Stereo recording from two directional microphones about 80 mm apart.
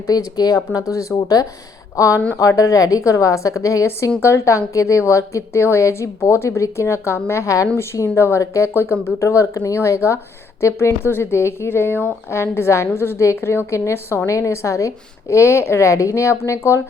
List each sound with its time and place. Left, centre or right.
0.1 s a woman's voice: left